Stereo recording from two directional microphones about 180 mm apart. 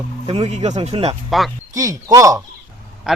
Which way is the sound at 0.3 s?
40° right (ahead or behind).